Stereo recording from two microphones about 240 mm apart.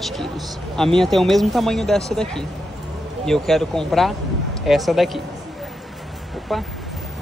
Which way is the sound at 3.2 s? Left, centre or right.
Centre.